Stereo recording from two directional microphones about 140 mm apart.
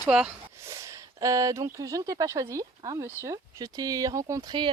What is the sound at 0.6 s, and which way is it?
Speech, 25° right (ahead or behind).